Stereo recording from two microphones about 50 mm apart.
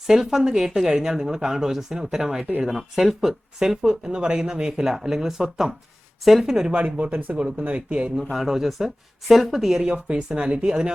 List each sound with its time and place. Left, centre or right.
0.1 s speech: centre
6.7 s speech: right
8.2 s speech: centre
9.8 s speech: right